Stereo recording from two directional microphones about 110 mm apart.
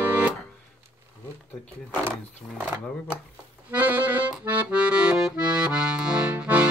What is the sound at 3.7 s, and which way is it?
Accordion, 15° right (ahead or behind).